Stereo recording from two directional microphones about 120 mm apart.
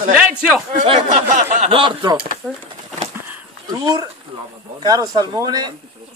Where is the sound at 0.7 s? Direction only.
75° right (ahead or behind).